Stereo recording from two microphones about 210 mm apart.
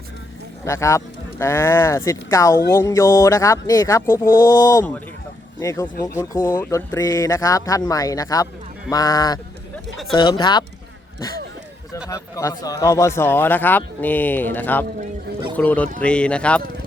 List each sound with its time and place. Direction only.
0.6 s a man's voice: 15° left (ahead or behind)
12.0 s a man's voice: 15° left (ahead or behind)